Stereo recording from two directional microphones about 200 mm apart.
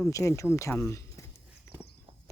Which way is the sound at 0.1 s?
15° left (ahead or behind).